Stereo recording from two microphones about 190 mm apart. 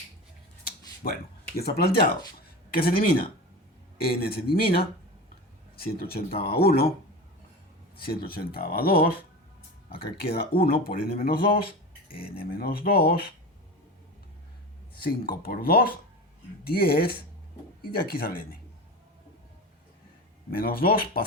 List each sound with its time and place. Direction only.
1.0 s speech: 45° left (ahead or behind)
2.6 s a sound: 50° left (ahead or behind)
3.0 s speech: 50° left (ahead or behind)
7.9 s speech: 55° left (ahead or behind)
10.2 s speech: 55° left (ahead or behind)
11.6 s a sound: 30° left (ahead or behind)
12.3 s speech: 50° left (ahead or behind)
14.9 s speech: 55° left (ahead or behind)
20.6 s speech: 50° left (ahead or behind)